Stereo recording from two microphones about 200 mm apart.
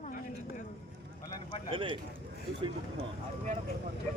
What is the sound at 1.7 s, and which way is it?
Speech, 25° right (ahead or behind).